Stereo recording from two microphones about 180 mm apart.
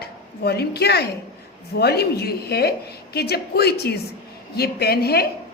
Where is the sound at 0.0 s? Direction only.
65° left (ahead or behind).